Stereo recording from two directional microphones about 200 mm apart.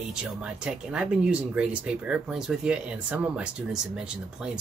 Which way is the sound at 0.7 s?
5° right (ahead or behind).